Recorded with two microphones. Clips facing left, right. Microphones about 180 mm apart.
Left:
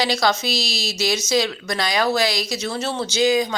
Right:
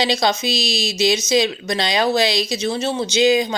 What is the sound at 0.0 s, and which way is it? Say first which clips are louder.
Speech: right 1 dB; 20° right (ahead or behind).